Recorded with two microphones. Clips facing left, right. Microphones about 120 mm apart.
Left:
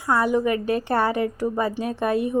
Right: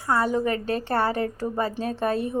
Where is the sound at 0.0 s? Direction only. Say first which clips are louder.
Left 2 dB; 15° left (ahead or behind).